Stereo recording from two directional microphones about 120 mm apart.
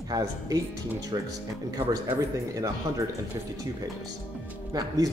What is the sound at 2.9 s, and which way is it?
Speech, 25° right (ahead or behind).